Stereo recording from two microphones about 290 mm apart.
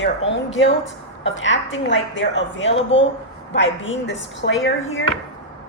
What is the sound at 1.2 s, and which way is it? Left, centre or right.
Speech, left.